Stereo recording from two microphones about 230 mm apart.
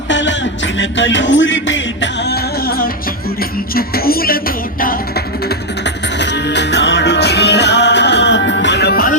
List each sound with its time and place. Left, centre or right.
0.1 s music: left